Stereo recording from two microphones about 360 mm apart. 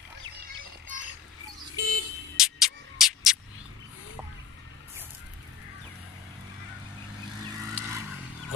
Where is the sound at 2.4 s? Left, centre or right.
Centre.